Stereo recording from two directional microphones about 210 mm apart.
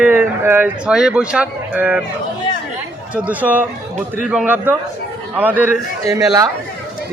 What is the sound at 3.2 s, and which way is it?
A man's voice, 5° right (ahead or behind).